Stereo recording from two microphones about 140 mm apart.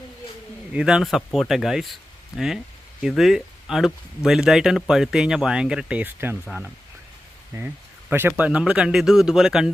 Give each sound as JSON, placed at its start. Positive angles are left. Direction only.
{"t": 0.7, "sound": "speech", "side_deg": -5}
{"t": 7.5, "sound": "speech", "side_deg": -25}
{"t": 8.3, "sound": "speech", "side_deg": -5}